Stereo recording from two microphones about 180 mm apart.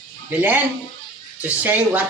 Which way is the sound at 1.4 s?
10° right (ahead or behind).